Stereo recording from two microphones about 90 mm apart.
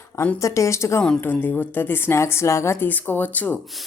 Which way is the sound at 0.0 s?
30° left (ahead or behind).